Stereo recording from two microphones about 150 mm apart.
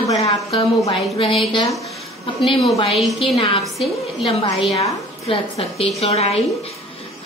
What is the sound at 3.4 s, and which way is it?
A woman's voice, 40° left (ahead or behind).